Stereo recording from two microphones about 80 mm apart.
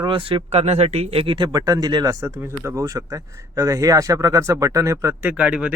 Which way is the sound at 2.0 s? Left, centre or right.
Right.